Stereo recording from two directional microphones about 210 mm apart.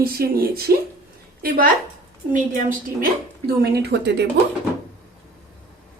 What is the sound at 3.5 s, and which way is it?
Speech, 50° right (ahead or behind).